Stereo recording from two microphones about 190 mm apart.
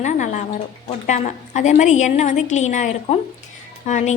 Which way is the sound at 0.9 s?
40° left (ahead or behind).